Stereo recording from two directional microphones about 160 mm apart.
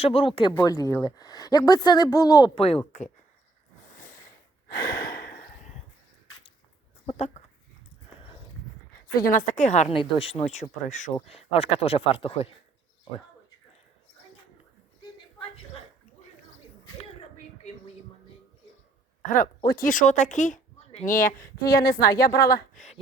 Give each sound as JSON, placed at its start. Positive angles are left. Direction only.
{"t": 0.0, "sound": "speech", "side_deg": 35}
{"t": 0.5, "sound": "a woman's voice", "side_deg": 20}
{"t": 2.6, "sound": "speech", "side_deg": 40}
{"t": 3.8, "sound": "a sound", "side_deg": 55}
{"t": 4.7, "sound": "a sound", "side_deg": 75}
{"t": 9.2, "sound": "a woman's voice", "side_deg": 55}
{"t": 9.9, "sound": "speech", "side_deg": 35}
{"t": 19.3, "sound": "speech", "side_deg": 60}
{"t": 21.6, "sound": "a woman's voice", "side_deg": 20}
{"t": 22.3, "sound": "speech", "side_deg": 85}
{"t": 22.7, "sound": "a sound", "side_deg": 50}